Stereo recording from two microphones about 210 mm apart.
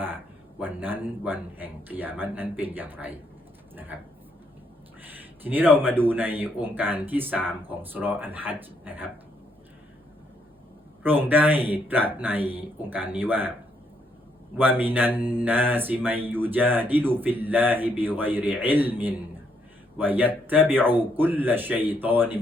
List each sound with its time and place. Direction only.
0.6 s speech: 10° right (ahead or behind)
5.1 s speech: 10° right (ahead or behind)
11.0 s speech: 10° right (ahead or behind)
14.6 s speech: 10° right (ahead or behind)